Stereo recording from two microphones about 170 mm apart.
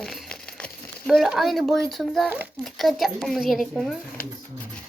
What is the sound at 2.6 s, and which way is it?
Speech, centre (ahead or behind).